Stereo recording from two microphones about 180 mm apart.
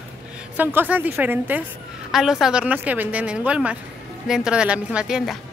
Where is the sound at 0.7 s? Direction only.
10° right (ahead or behind).